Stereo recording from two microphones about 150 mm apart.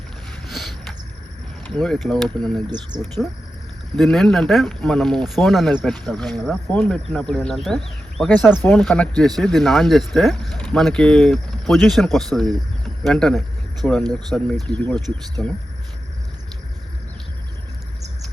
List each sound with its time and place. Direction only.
1.6 s speech: 5° left (ahead or behind)
2.6 s speech: 30° right (ahead or behind)
3.9 s speech: centre (ahead or behind)